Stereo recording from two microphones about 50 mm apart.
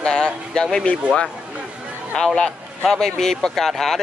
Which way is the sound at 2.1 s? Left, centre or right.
Centre.